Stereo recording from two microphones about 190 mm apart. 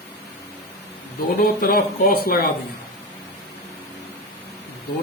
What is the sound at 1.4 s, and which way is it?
Speech, 50° left (ahead or behind).